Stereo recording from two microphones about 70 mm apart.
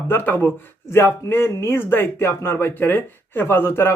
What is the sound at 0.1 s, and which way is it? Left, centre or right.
Speech, left.